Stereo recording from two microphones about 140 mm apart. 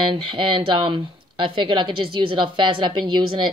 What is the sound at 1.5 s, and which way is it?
A woman's voice, 35° right (ahead or behind).